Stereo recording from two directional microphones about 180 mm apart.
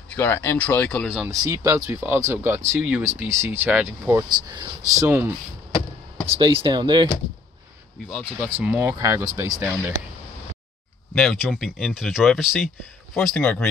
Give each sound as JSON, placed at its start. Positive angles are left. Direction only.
{"t": 0.1, "sound": "speech", "side_deg": 10}
{"t": 1.4, "sound": "speech", "side_deg": -15}
{"t": 4.3, "sound": "speech", "side_deg": -25}
{"t": 5.0, "sound": "speech", "side_deg": -10}
{"t": 6.3, "sound": "speech", "side_deg": -30}
{"t": 8.6, "sound": "speech", "side_deg": -10}
{"t": 11.1, "sound": "speech", "side_deg": 0}